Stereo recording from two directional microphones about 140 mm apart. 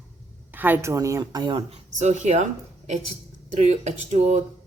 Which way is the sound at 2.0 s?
55° right (ahead or behind).